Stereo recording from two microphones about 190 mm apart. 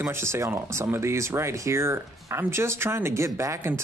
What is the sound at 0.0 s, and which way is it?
Speech, 15° right (ahead or behind).